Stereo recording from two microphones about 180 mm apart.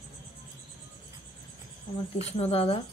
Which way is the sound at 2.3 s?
35° left (ahead or behind).